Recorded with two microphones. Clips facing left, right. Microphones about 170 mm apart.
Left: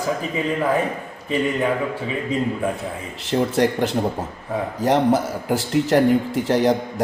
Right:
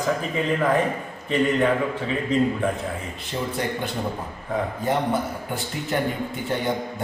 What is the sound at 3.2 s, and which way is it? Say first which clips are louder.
A man's voice: left 10 dB; 85° left.